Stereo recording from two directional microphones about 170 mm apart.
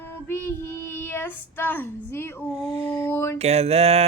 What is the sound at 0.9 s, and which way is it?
Child singing, 15° left (ahead or behind).